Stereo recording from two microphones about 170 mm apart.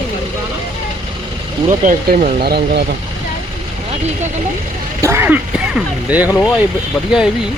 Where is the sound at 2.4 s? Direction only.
70° right (ahead or behind).